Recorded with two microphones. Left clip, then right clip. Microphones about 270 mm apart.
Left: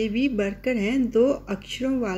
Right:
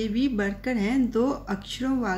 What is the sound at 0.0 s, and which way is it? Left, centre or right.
Speech, right.